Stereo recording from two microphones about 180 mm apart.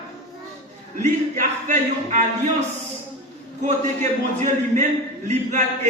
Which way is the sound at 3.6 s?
40° right (ahead or behind).